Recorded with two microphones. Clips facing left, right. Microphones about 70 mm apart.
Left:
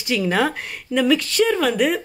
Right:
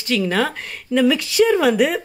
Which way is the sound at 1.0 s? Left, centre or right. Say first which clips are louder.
Right 2 dB; centre.